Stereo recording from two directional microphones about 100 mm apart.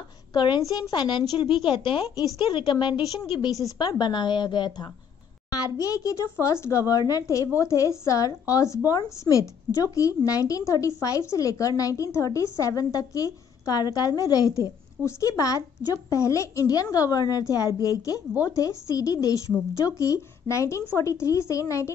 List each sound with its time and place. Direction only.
0.3 s a woman's voice: 50° left (ahead or behind)
0.6 s a woman's voice: 35° left (ahead or behind)
5.5 s a child's voice: 35° left (ahead or behind)